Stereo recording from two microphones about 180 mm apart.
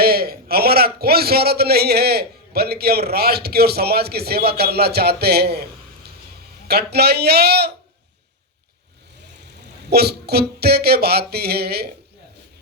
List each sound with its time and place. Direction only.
0.0 s a man's voice: 60° right (ahead or behind)
6.7 s a man's voice: 65° right (ahead or behind)
9.9 s a man's voice: 65° right (ahead or behind)